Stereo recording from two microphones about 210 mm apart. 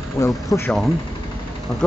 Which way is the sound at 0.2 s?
15° left (ahead or behind).